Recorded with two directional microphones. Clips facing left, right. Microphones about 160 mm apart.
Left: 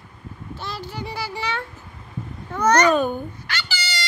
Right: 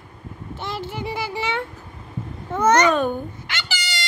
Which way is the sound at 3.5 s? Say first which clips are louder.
Left 1 dB; 20° right (ahead or behind).